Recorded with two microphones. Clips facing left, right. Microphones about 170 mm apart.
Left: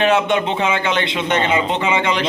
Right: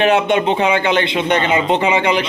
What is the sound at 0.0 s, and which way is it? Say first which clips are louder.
A man's voice: right 2 dB; 40° right (ahead or behind).